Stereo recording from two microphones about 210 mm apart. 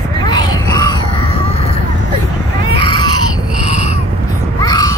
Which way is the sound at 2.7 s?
25° left (ahead or behind).